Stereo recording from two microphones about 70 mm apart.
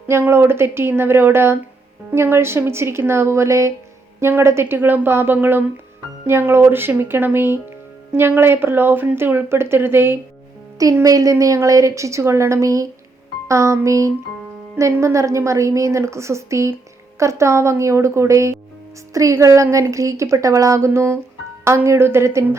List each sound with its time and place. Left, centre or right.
0.1 s speech: right
11.0 s a woman's voice: right